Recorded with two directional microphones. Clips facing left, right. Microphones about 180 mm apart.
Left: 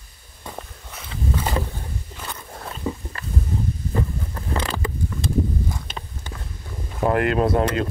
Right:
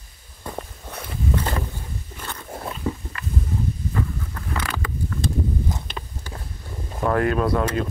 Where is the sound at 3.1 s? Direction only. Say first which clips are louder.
Even; 35° left (ahead or behind).